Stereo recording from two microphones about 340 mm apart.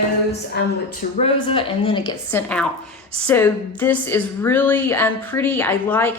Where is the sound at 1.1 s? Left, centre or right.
Centre.